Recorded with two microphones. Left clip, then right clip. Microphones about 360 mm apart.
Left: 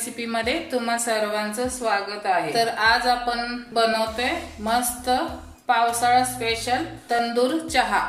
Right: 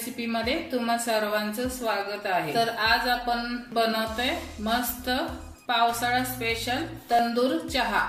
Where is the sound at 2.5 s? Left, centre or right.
Centre.